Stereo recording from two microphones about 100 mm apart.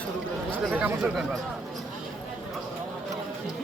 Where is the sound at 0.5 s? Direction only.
15° right (ahead or behind).